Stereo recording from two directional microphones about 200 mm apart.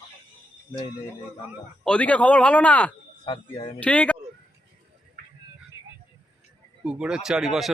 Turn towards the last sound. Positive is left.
turn(degrees=0)  # may be behind; listen again after turning